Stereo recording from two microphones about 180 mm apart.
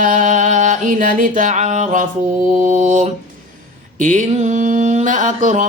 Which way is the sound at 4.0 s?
45° right (ahead or behind).